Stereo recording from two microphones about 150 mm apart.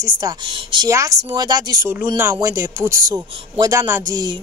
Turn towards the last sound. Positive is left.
turn(degrees=-25)  # may be behind; listen again after turning